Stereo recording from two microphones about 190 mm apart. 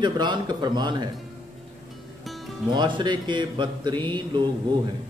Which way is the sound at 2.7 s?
25° right (ahead or behind).